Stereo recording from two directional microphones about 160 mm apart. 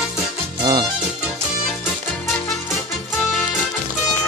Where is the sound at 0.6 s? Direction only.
25° right (ahead or behind).